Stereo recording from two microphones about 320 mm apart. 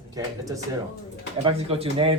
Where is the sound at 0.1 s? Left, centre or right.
Centre.